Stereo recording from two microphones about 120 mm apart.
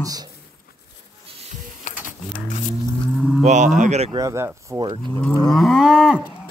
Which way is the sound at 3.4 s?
90° right.